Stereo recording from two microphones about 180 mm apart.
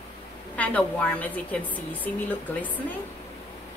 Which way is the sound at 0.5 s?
10° left (ahead or behind).